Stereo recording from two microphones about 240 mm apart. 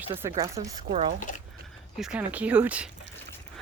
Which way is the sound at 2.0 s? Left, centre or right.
Centre.